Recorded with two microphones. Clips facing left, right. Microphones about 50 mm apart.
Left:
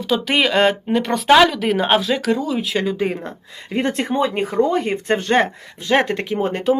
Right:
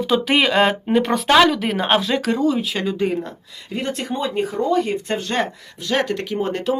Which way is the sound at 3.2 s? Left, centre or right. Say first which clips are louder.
Right 3 dB; left.